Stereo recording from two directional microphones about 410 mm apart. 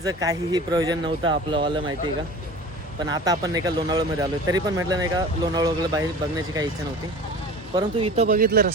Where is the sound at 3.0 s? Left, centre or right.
Centre.